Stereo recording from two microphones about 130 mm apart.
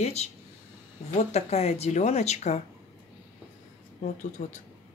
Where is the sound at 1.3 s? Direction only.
55° left (ahead or behind).